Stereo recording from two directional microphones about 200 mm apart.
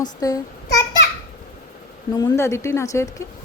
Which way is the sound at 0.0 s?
20° left (ahead or behind).